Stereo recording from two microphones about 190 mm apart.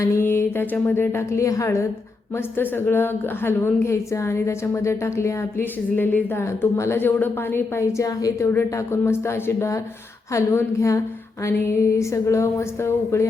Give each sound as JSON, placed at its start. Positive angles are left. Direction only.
{"t": 0.0, "sound": "a woman's voice", "side_deg": 15}